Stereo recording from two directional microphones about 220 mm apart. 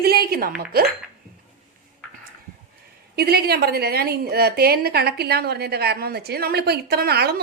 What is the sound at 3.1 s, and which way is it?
A woman's voice, 45° right (ahead or behind).